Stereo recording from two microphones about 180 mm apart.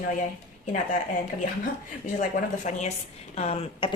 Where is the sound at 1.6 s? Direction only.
45° left (ahead or behind).